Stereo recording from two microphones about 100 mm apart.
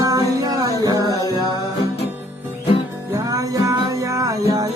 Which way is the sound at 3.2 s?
35° right (ahead or behind).